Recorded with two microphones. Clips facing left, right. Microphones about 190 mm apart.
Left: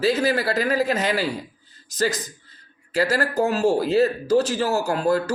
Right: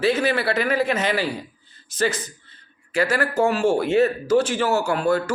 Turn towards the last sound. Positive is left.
turn(degrees=35)  # may be behind; listen again after turning